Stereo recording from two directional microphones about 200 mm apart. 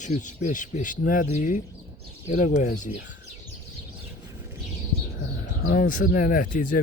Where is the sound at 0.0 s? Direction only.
40° left (ahead or behind).